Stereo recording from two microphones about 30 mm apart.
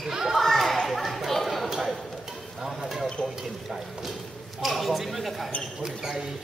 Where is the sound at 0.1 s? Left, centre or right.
Centre.